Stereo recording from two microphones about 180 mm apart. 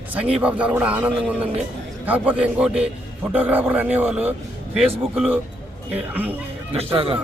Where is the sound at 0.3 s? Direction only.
5° right (ahead or behind).